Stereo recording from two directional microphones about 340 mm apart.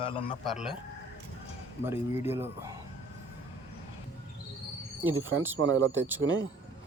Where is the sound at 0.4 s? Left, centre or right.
Centre.